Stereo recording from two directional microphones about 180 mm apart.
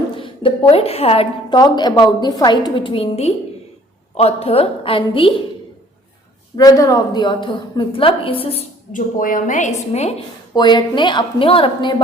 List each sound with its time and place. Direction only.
0.2 s a woman's voice: 30° left (ahead or behind)
6.6 s a woman's voice: 20° left (ahead or behind)
8.9 s a woman's voice: 50° left (ahead or behind)
10.5 s a woman's voice: 25° left (ahead or behind)